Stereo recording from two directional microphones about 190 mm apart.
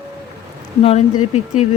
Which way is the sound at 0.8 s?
35° left (ahead or behind).